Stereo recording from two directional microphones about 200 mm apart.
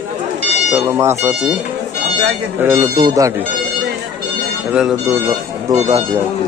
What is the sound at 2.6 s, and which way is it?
Speech, 10° right (ahead or behind).